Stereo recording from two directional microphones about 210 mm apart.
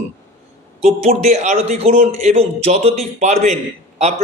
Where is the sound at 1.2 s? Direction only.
35° right (ahead or behind).